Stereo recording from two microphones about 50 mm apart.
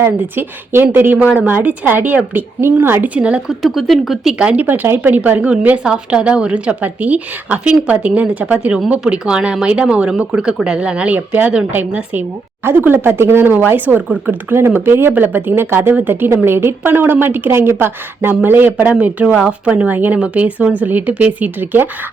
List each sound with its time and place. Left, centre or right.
0.0 s a woman's voice: right
2.8 s a woman's voice: right
3.2 s speech: right
3.6 s speech: centre
4.4 s speech: right
4.6 s a woman's voice: right
5.2 s speech: right
5.8 s speech: centre; by 11.5 s right
12.6 s a woman's voice: right
13.7 s speech: right
14.5 s a woman's voice: right
20.7 s speech: right